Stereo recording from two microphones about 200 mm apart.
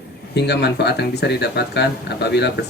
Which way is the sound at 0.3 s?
55° left (ahead or behind).